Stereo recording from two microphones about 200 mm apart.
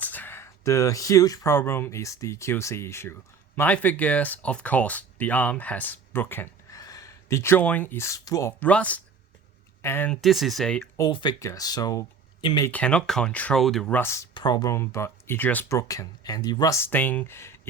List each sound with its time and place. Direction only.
0.0 s speech: 10° left (ahead or behind)
10.9 s speech: 20° left (ahead or behind)
12.6 s speech: 5° left (ahead or behind)